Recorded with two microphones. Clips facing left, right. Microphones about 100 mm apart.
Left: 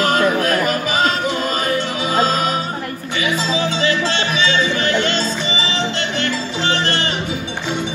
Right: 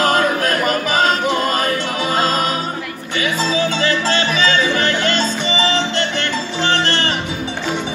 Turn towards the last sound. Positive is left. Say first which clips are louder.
# right 2 dB
turn(degrees=-40)  # may be behind; listen again after turning